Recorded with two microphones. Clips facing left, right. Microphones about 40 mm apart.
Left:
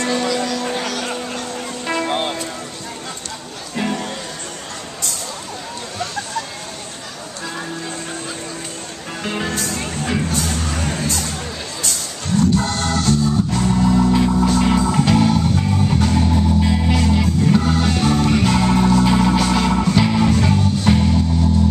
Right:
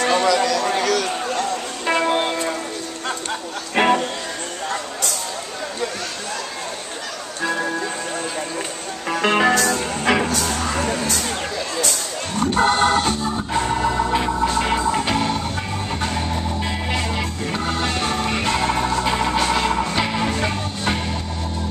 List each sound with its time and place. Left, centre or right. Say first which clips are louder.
0.0 s music: right 2 dB; right
0.3 s music: right 3 dB; right
2.0 s music: right 1 dB; centre
3.7 s music: right 6 dB; right
9.2 s music: right 7 dB; right
12.4 s organ: right 1 dB; right; by 21.2 s centre